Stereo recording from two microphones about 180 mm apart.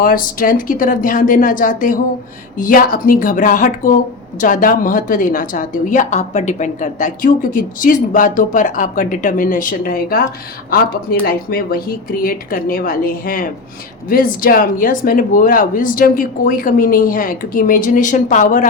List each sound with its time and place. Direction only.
0.0 s a woman's voice: 50° left (ahead or behind)